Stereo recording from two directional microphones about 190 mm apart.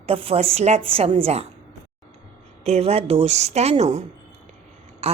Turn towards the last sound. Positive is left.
turn(degrees=-35)  # may be behind; listen again after turning